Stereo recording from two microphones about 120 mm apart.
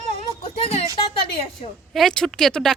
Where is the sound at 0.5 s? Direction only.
60° left (ahead or behind).